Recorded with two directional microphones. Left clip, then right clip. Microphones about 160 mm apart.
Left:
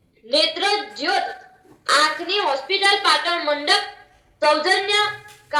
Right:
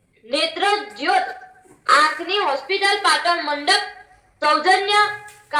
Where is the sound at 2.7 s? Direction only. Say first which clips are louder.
Left 1 dB; 45° right (ahead or behind).